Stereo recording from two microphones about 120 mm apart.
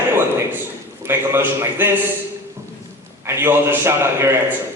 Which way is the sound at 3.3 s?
20° right (ahead or behind).